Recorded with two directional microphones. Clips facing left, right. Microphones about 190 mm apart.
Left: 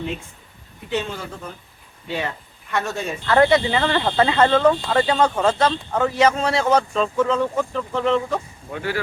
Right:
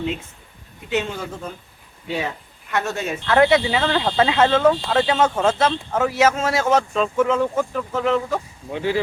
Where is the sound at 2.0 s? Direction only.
10° right (ahead or behind).